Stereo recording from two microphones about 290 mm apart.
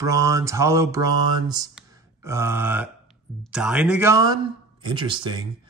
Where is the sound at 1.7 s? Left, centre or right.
Centre.